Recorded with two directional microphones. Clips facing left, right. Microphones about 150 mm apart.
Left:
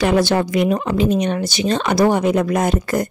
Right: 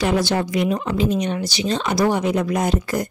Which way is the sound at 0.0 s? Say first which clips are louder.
Left 4 dB; 60° left (ahead or behind).